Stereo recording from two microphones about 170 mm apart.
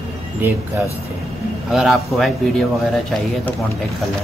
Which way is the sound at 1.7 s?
Centre (ahead or behind).